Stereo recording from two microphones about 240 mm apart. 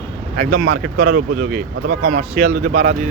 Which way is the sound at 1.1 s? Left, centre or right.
Right.